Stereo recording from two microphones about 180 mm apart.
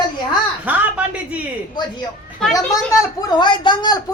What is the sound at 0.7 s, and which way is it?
Speech, 10° right (ahead or behind).